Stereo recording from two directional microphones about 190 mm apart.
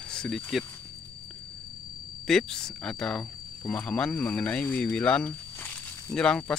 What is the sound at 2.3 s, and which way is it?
Speech, 5° left (ahead or behind).